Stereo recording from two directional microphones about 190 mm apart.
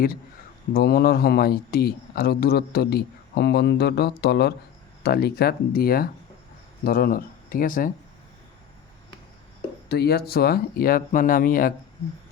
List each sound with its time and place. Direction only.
0.7 s speech: 55° left (ahead or behind)
9.9 s speech: 55° left (ahead or behind)